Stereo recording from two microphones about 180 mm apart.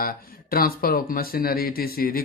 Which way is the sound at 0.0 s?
55° left (ahead or behind).